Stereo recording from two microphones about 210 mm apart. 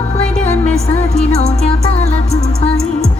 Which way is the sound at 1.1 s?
30° left (ahead or behind).